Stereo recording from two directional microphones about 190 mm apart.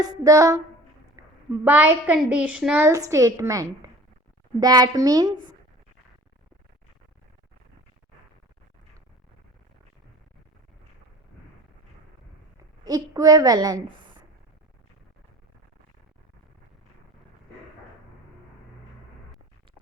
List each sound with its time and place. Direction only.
0.0 s a woman's voice: 15° right (ahead or behind)
12.8 s a child's voice: 20° right (ahead or behind)